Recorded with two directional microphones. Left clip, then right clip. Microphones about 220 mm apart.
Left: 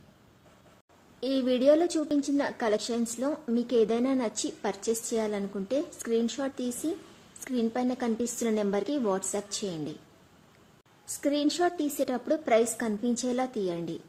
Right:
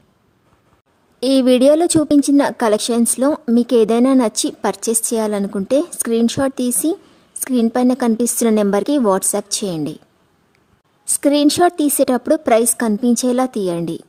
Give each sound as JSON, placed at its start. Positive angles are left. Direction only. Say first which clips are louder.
{"t": 1.2, "sound": "a woman's voice", "louder": "right 13 dB", "side_deg": -55}
{"t": 11.2, "sound": "a woman's voice", "louder": "right 14 dB", "side_deg": -50}